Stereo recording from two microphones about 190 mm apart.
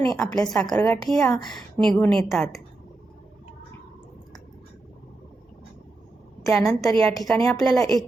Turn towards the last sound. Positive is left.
turn(degrees=0)  # may be behind; listen again after turning